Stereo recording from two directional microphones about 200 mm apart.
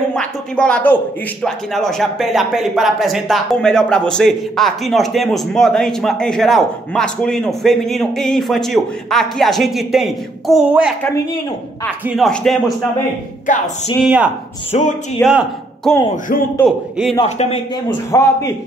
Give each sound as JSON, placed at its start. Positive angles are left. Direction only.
{"t": 0.1, "sound": "a sound", "side_deg": 5}
{"t": 1.4, "sound": "speech", "side_deg": 0}
{"t": 12.1, "sound": "speech", "side_deg": 0}
{"t": 13.5, "sound": "speech", "side_deg": 40}
{"t": 14.0, "sound": "a man's voice", "side_deg": -5}
{"t": 17.1, "sound": "speech", "side_deg": 25}
{"t": 18.1, "sound": "a man's voice", "side_deg": 15}